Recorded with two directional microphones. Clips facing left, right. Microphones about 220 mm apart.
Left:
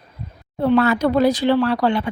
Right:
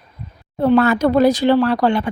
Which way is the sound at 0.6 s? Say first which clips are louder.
Right 2 dB; 50° right (ahead or behind).